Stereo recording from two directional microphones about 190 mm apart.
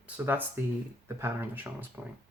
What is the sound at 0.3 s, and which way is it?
Speech, 10° right (ahead or behind).